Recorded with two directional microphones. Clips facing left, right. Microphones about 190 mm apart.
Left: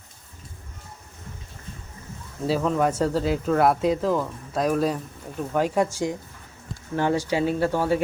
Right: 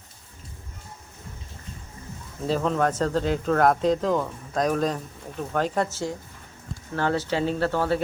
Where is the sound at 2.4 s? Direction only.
5° left (ahead or behind).